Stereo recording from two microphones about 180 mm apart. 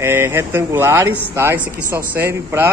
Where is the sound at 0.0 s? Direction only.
15° right (ahead or behind).